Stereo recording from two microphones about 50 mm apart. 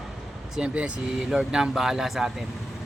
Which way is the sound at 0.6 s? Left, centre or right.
Right.